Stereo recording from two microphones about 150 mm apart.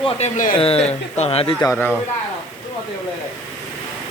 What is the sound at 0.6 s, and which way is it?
Speech, 40° left (ahead or behind).